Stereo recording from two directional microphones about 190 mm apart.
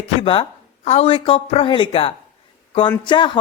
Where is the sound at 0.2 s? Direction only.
25° left (ahead or behind).